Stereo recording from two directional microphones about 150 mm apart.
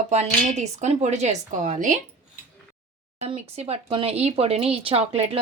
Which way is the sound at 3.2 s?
40° right (ahead or behind).